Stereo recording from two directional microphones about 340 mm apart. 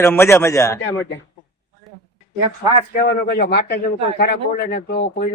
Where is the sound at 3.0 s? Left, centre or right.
Left.